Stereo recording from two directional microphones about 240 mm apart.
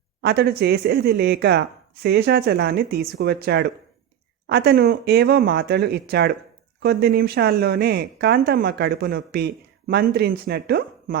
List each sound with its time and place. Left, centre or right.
0.2 s speech: right